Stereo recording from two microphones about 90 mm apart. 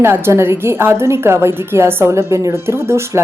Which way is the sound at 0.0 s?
30° right (ahead or behind).